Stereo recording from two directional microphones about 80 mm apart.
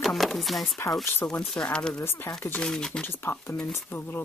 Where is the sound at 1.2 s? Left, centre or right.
Centre.